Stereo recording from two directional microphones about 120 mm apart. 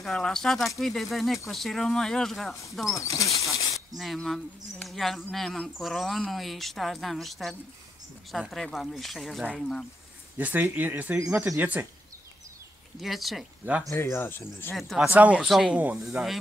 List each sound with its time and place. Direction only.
0.0 s speech: 5° left (ahead or behind)
3.0 s speech: 25° left (ahead or behind)
3.3 s a sound: 25° left (ahead or behind)
3.9 s speech: centre (ahead or behind)
10.3 s speech: 15° right (ahead or behind)
11.2 s speech: 5° right (ahead or behind)
13.0 s speech: centre (ahead or behind)
13.8 s speech: 20° left (ahead or behind)
14.8 s speech: centre (ahead or behind)
15.0 s speech: 10° right (ahead or behind)